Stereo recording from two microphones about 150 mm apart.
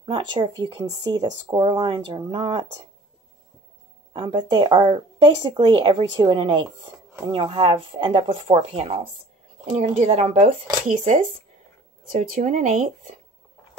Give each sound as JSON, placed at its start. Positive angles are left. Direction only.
{"t": 0.0, "sound": "speech", "side_deg": -30}
{"t": 4.1, "sound": "speech", "side_deg": -30}